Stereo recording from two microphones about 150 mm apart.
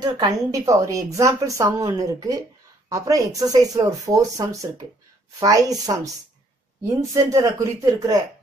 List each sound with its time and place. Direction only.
0.0 s a woman's voice: 25° right (ahead or behind)
7.2 s a woman's voice: 20° right (ahead or behind)